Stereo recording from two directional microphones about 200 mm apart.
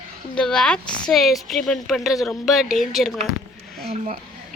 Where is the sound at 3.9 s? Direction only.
35° right (ahead or behind).